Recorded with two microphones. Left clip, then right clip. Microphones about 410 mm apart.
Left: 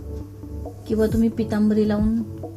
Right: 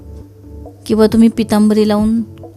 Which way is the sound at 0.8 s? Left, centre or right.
Right.